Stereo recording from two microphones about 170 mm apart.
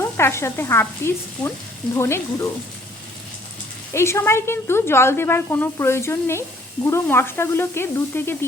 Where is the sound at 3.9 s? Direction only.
15° left (ahead or behind).